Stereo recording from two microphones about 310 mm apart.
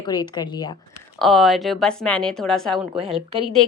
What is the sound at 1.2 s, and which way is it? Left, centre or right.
A woman's voice, centre.